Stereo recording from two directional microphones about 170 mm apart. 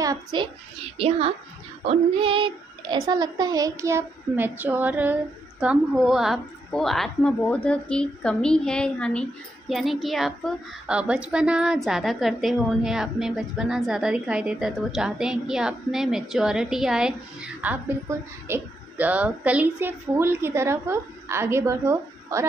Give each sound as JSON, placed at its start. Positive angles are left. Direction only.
{"t": 0.0, "sound": "a child's voice", "side_deg": -25}
{"t": 0.9, "sound": "a woman's voice", "side_deg": -35}